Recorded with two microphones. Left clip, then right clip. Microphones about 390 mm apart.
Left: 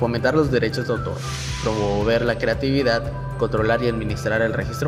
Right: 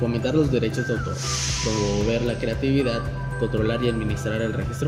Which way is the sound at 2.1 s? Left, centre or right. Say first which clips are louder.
Left 5 dB; centre.